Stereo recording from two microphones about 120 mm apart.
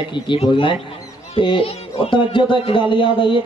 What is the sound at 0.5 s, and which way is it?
Speech, 40° left (ahead or behind).